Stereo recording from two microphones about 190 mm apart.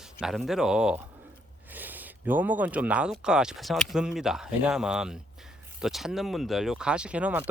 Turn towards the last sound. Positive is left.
turn(degrees=-5)  # may be behind; listen again after turning